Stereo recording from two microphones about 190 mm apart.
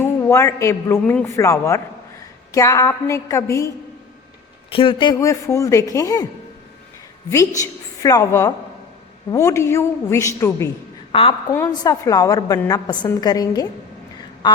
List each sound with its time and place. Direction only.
0.0 s a man's voice: 15° left (ahead or behind)
4.7 s a woman's voice: 30° left (ahead or behind)
7.3 s a man's voice: 15° left (ahead or behind)
11.1 s a woman's voice: 30° left (ahead or behind)
11.5 s a woman's voice: 15° left (ahead or behind)